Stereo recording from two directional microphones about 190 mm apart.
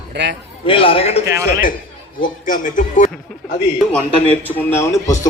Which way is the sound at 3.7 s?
5° left (ahead or behind).